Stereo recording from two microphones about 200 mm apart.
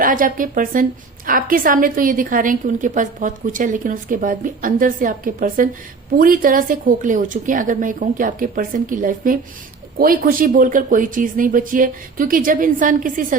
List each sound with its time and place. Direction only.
0.0 s a woman's voice: 45° right (ahead or behind)